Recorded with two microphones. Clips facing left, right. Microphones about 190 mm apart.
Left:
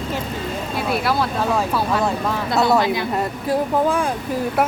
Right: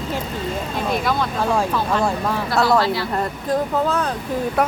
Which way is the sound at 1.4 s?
10° right (ahead or behind).